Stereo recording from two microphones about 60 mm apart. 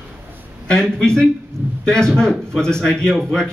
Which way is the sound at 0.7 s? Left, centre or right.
Centre.